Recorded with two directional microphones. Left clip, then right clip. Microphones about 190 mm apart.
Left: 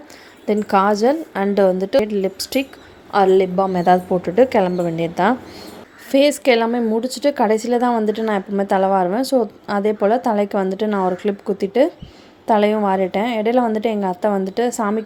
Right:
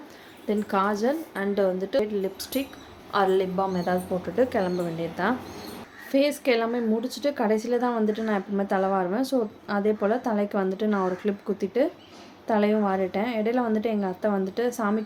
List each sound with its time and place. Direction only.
0.4 s speech: 40° left (ahead or behind)